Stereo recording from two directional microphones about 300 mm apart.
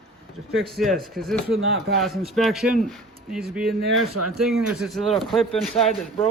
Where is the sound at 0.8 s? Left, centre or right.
Centre.